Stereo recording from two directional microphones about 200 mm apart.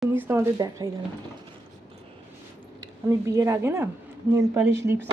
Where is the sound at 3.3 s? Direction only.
15° right (ahead or behind).